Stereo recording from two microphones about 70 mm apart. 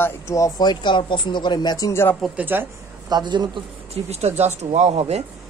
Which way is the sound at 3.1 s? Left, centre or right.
Right.